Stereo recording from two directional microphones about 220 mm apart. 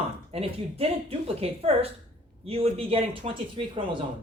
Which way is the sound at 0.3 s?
25° right (ahead or behind).